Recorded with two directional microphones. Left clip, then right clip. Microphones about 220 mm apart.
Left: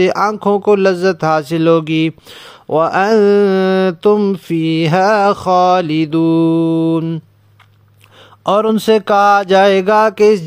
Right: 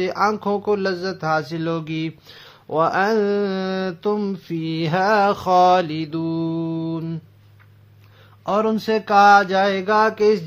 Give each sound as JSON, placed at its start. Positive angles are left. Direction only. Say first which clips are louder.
{"t": 0.0, "sound": "speech", "louder": "left 7 dB", "side_deg": 40}
{"t": 8.5, "sound": "mantra", "louder": "left 8 dB", "side_deg": 45}